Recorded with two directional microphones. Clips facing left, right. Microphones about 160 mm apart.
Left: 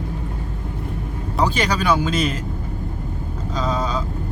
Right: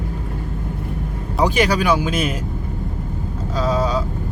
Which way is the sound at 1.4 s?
10° right (ahead or behind).